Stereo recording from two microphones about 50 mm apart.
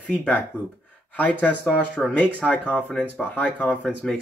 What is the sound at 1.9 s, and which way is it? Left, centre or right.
Speech, centre.